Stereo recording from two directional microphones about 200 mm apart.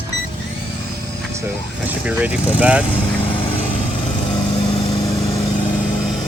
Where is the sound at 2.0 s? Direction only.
5° right (ahead or behind).